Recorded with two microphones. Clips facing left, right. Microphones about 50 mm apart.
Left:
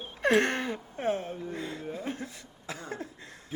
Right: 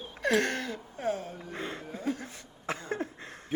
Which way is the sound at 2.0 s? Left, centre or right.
Left.